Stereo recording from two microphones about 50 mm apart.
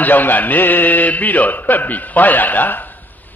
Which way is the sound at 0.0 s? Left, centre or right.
Left.